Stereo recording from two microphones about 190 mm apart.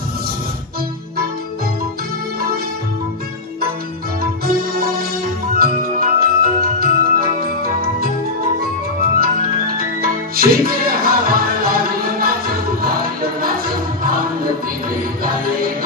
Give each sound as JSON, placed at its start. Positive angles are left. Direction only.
{"t": 4.2, "sound": "music", "side_deg": -50}
{"t": 13.4, "sound": "music", "side_deg": -50}